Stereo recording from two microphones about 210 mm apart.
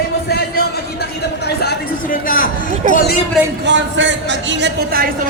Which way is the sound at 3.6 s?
60° right (ahead or behind).